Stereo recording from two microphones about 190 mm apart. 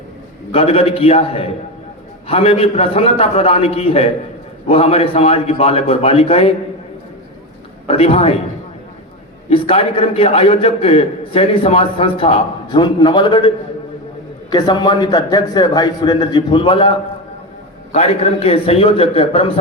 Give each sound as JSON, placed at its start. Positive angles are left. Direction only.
{"t": 0.5, "sound": "a man's voice", "side_deg": 30}
{"t": 7.9, "sound": "a man's voice", "side_deg": 30}
{"t": 9.5, "sound": "a man's voice", "side_deg": 30}
{"t": 14.5, "sound": "a man's voice", "side_deg": 25}